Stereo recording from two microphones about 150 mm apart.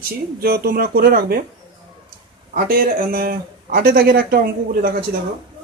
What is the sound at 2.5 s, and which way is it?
A man's voice, 80° right.